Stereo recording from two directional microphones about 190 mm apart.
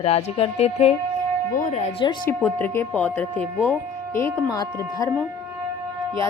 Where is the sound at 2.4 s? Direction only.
10° left (ahead or behind).